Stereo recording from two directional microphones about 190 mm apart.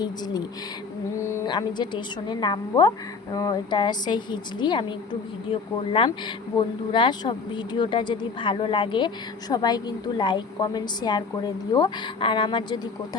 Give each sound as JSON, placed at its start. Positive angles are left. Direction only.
{"t": 1.2, "sound": "speech", "side_deg": 20}